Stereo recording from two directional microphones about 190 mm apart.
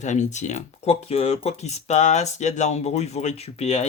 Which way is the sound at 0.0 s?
40° left (ahead or behind).